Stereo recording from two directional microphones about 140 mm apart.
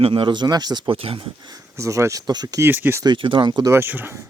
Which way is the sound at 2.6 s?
15° right (ahead or behind).